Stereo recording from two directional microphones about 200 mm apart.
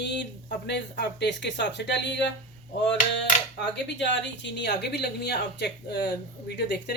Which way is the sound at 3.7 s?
60° left (ahead or behind).